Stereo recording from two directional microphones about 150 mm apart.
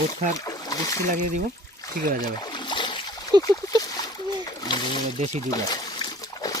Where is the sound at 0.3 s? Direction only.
25° left (ahead or behind).